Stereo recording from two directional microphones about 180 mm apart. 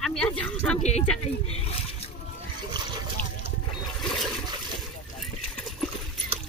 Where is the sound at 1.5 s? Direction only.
35° left (ahead or behind).